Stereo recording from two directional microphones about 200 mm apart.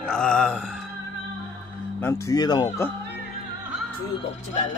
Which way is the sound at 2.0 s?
15° left (ahead or behind).